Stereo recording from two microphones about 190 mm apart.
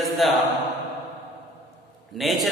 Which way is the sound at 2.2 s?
Centre (ahead or behind).